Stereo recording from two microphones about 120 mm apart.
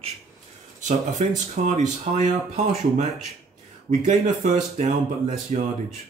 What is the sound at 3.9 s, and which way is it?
Speech, 90° right.